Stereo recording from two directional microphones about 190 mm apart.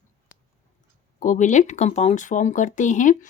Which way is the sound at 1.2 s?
40° left (ahead or behind).